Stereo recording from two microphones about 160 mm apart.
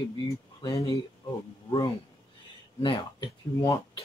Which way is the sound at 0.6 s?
35° left (ahead or behind).